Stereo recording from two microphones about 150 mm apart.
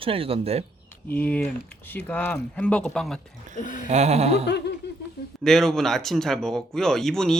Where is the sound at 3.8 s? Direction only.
50° right (ahead or behind).